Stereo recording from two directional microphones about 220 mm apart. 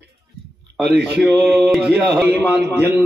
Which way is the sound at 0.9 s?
45° right (ahead or behind).